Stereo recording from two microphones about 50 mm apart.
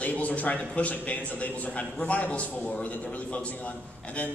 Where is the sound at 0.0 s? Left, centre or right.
Left.